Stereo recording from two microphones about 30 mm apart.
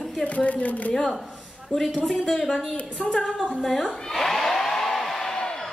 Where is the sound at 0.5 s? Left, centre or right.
Left.